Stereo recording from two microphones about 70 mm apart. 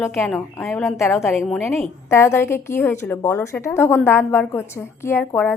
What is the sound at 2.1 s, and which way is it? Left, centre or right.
A woman's voice, left.